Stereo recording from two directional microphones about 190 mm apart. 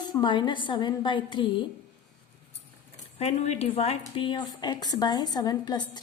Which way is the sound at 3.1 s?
35° left (ahead or behind).